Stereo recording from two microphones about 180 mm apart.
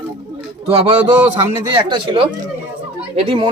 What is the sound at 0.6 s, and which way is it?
A man's voice, 30° right (ahead or behind).